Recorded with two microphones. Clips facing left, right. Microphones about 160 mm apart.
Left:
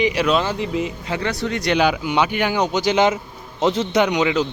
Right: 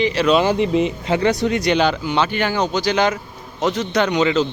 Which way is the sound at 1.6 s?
5° left (ahead or behind).